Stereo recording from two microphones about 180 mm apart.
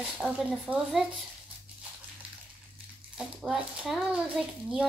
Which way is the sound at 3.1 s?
5° right (ahead or behind).